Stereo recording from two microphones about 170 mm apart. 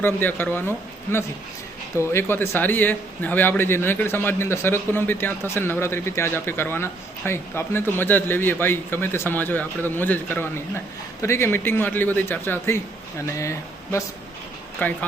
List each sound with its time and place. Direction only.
0.0 s a man's voice: 10° left (ahead or behind)
2.0 s a man's voice: 15° left (ahead or behind)